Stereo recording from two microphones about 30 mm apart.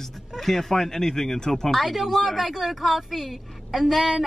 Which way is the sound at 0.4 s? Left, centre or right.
Centre.